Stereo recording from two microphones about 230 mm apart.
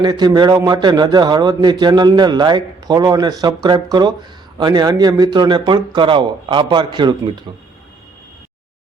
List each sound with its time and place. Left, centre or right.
0.0 s a man's voice: centre